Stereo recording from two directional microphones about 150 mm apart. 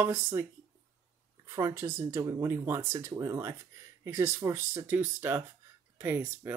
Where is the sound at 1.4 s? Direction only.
20° right (ahead or behind).